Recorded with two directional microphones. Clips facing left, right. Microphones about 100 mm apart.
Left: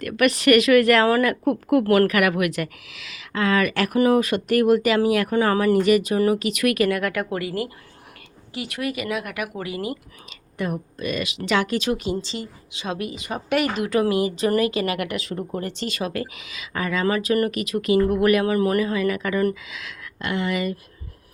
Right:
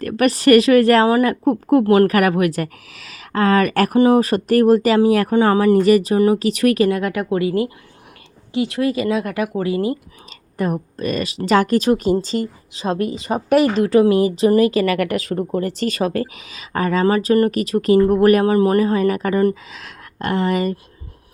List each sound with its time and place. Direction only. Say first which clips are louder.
0.0 s speech: right 4 dB; 35° right (ahead or behind)
10.6 s speech: right 5 dB; 40° right (ahead or behind)
18.5 s speech: right 5 dB; 30° right (ahead or behind)